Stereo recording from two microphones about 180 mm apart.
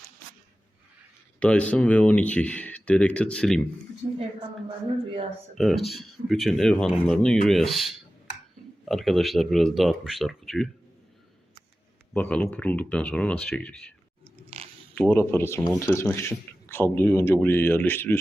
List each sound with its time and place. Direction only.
1.4 s speech: 5° left (ahead or behind)
5.5 s speech: centre (ahead or behind)
12.1 s speech: 10° left (ahead or behind)
14.5 s mechanisms: 35° right (ahead or behind)
14.9 s speech: 10° left (ahead or behind)